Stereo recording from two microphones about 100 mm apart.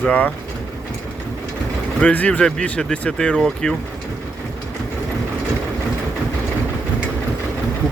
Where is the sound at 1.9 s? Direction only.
15° left (ahead or behind).